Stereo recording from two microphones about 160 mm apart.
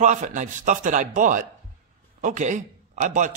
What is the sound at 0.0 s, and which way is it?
Speech, 50° right (ahead or behind).